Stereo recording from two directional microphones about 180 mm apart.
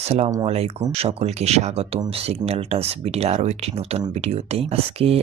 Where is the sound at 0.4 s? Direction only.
35° right (ahead or behind).